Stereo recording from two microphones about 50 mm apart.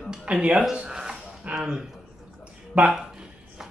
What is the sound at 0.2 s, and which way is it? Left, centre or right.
Speech, right.